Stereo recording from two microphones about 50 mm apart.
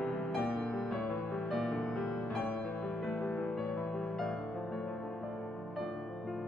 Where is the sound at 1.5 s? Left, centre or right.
Centre.